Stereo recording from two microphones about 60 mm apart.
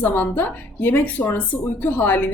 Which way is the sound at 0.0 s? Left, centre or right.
Left.